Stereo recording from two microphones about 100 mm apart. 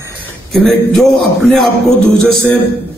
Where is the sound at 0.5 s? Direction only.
5° left (ahead or behind).